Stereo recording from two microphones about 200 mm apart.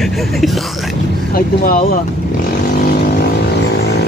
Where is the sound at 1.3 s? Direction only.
45° left (ahead or behind).